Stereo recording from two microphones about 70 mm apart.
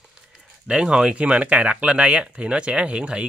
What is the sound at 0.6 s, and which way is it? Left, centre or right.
Speech, centre.